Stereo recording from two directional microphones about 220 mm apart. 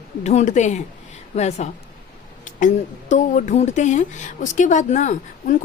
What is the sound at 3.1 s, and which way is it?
Speech, 35° left (ahead or behind).